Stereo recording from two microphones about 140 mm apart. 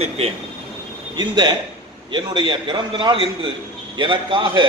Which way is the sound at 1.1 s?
30° right (ahead or behind).